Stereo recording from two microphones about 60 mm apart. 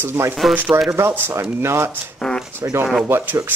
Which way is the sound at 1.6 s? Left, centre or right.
Right.